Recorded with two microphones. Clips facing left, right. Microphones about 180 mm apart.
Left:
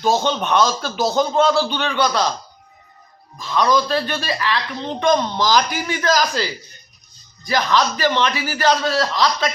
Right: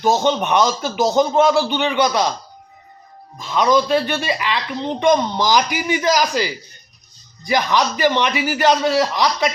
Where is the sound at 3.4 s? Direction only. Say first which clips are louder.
Right 2 dB; 15° right (ahead or behind).